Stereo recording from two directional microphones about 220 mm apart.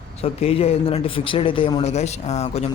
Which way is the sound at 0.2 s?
25° left (ahead or behind).